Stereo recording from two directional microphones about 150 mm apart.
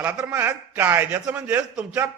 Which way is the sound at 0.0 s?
10° right (ahead or behind).